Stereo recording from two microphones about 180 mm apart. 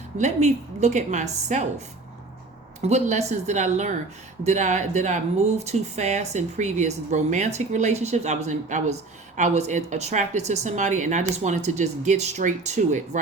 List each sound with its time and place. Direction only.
0.2 s speech: 40° right (ahead or behind)
2.8 s speech: 40° right (ahead or behind)